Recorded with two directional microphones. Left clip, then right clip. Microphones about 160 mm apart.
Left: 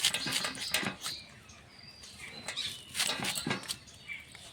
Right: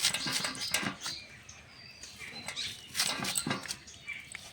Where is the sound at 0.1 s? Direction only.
Centre (ahead or behind).